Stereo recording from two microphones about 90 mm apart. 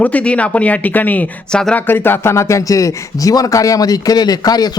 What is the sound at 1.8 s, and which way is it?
Speech, 25° left (ahead or behind).